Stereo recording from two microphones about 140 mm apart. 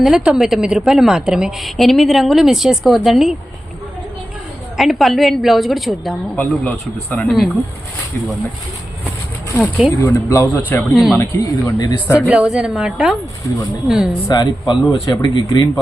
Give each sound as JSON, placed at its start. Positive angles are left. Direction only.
{"t": 0.0, "sound": "a woman's voice", "side_deg": -5}
{"t": 4.8, "sound": "a woman's voice", "side_deg": 0}
{"t": 10.0, "sound": "speech", "side_deg": 20}
{"t": 10.9, "sound": "a woman's voice", "side_deg": -5}
{"t": 11.2, "sound": "speech", "side_deg": 25}
{"t": 12.3, "sound": "a woman's voice", "side_deg": -5}
{"t": 14.3, "sound": "speech", "side_deg": 30}